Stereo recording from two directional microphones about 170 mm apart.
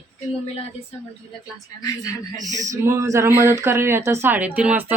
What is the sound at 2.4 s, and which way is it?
Speech, 20° right (ahead or behind).